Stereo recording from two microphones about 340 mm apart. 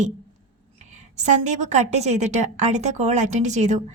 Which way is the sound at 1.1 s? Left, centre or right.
Right.